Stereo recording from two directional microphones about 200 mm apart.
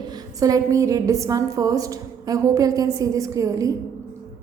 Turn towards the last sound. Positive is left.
turn(degrees=-15)  # may be behind; listen again after turning